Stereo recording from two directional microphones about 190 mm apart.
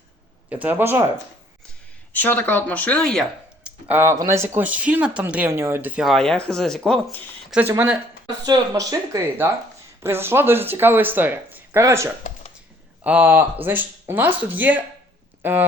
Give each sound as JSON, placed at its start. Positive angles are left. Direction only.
{"t": 0.5, "sound": "speech", "side_deg": -10}
{"t": 2.1, "sound": "speech", "side_deg": 10}
{"t": 7.6, "sound": "speech", "side_deg": -10}